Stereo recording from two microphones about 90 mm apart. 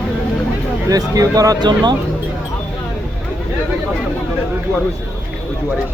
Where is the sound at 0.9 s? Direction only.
40° right (ahead or behind).